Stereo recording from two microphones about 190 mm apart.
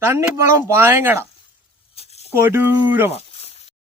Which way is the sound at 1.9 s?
30° left (ahead or behind).